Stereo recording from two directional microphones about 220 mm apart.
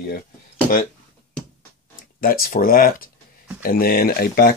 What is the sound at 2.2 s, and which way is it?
Speech, 40° left (ahead or behind).